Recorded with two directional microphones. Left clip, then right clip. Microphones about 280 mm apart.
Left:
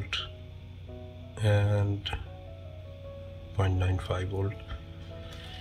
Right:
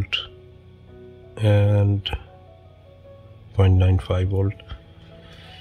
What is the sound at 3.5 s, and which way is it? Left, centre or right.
Speech, right.